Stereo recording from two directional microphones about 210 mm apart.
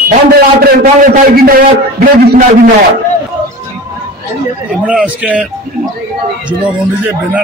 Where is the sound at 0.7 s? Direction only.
45° right (ahead or behind).